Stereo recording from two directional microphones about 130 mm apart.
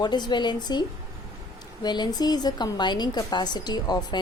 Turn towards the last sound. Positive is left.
turn(degrees=30)  # may be behind; listen again after turning